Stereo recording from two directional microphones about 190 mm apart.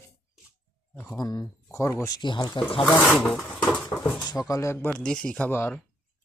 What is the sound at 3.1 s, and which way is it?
Speech, 5° left (ahead or behind).